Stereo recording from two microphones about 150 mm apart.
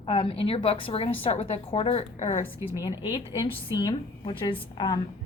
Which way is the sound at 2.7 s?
30° left (ahead or behind).